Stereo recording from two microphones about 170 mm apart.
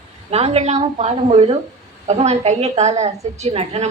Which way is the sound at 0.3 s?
35° right (ahead or behind).